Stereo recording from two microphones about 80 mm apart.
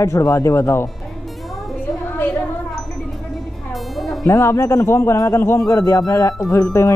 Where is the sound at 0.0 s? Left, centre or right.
Left.